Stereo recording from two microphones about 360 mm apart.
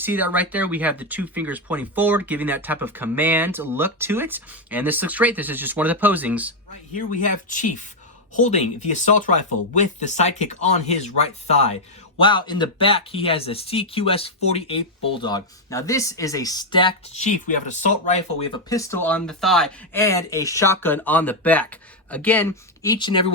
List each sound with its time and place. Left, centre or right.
0.0 s speech: centre
7.2 s speech: left